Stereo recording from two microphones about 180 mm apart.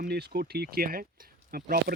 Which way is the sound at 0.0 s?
60° right (ahead or behind).